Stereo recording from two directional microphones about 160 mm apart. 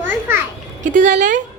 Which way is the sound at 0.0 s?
15° right (ahead or behind).